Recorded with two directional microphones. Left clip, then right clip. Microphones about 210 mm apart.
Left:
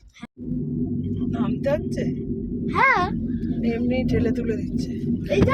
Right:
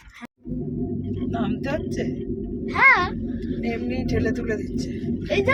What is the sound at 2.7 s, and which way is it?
Speech, 35° left (ahead or behind).